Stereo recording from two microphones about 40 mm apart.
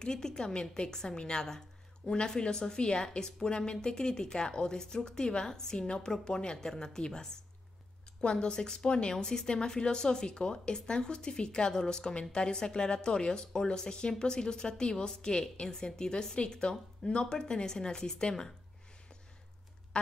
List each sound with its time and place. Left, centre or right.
0.0 s a woman's voice: centre